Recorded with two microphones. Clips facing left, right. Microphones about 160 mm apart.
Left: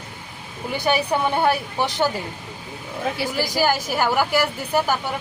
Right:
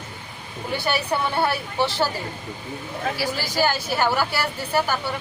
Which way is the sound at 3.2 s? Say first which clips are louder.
Left 1 dB; 15° left (ahead or behind).